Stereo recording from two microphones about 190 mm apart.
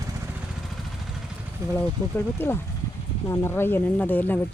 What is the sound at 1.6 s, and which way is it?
Speech, 15° right (ahead or behind).